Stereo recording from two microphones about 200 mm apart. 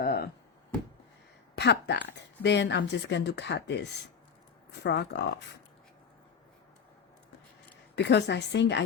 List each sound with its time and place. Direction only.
0.0 s a sound: 50° left (ahead or behind)
1.5 s speech: 60° left (ahead or behind)
7.9 s speech: 60° left (ahead or behind)